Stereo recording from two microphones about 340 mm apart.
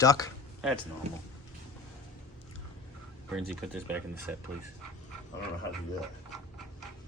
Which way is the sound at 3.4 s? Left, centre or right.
Centre.